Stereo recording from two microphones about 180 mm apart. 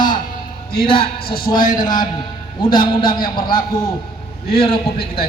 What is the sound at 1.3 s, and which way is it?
A man's voice, 25° left (ahead or behind).